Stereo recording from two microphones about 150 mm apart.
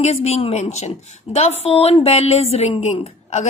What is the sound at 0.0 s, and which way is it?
A woman's voice, 45° left (ahead or behind).